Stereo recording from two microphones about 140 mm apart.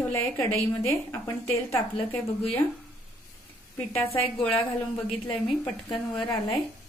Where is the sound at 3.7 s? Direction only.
15° left (ahead or behind).